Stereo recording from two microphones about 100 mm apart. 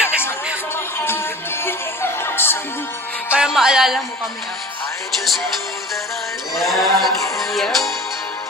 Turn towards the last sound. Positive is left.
turn(degrees=0)  # may be behind; listen again after turning